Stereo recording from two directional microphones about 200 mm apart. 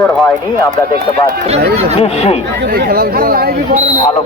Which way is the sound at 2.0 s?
30° left (ahead or behind).